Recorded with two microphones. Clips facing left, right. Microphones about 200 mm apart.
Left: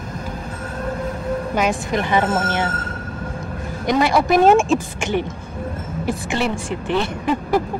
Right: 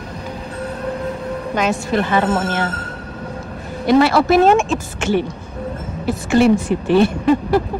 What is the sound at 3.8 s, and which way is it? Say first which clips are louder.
A woman's voice: right 4 dB; 15° left (ahead or behind).